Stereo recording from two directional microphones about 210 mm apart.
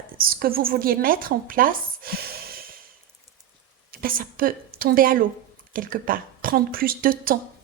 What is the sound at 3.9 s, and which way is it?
A woman's voice, 45° right (ahead or behind).